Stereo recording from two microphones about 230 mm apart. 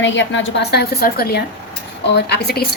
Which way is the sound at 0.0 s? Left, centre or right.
Left.